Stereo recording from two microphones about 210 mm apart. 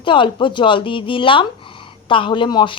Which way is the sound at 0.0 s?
25° left (ahead or behind).